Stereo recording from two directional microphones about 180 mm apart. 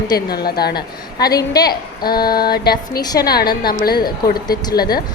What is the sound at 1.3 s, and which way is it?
Speech, 20° left (ahead or behind).